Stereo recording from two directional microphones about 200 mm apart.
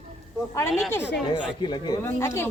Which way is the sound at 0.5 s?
10° left (ahead or behind).